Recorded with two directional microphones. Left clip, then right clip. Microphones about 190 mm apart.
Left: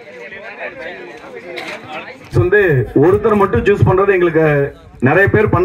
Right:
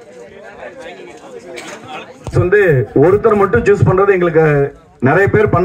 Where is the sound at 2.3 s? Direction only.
45° left (ahead or behind).